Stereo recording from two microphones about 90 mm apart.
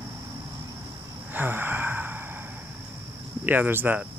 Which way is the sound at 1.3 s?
20° right (ahead or behind).